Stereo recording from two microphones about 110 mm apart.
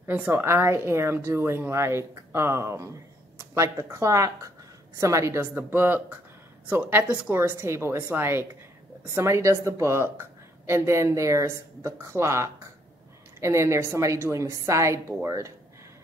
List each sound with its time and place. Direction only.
0.0 s a woman's voice: 20° right (ahead or behind)